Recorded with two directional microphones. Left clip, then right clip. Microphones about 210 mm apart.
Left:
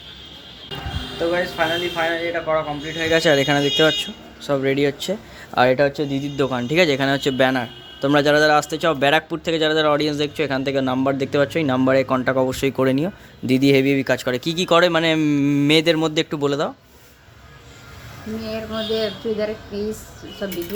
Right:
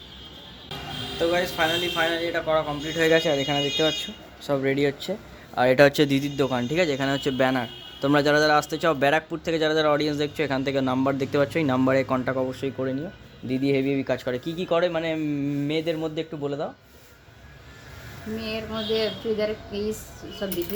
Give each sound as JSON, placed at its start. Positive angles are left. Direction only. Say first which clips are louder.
{"t": 1.3, "sound": "speech", "louder": "left 3 dB", "side_deg": -5}
{"t": 3.2, "sound": "speech", "louder": "left 7 dB", "side_deg": 15}
{"t": 4.4, "sound": "a man's voice", "louder": "left 4 dB", "side_deg": 5}
{"t": 5.7, "sound": "speech", "louder": "right 2 dB", "side_deg": -15}
{"t": 6.2, "sound": "a man's voice", "louder": "left 3 dB", "side_deg": 0}
{"t": 18.4, "sound": "a man's voice", "louder": "left 4 dB", "side_deg": 0}